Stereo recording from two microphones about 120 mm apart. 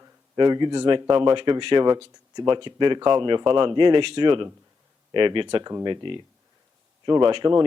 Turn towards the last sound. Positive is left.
turn(degrees=-40)  # may be behind; listen again after turning